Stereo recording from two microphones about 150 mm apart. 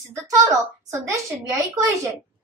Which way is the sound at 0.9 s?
20° right (ahead or behind).